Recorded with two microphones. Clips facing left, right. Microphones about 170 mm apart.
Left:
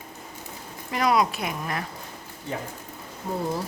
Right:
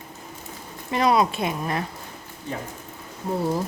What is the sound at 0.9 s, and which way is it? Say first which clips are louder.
Speech: right 2 dB; 25° right (ahead or behind).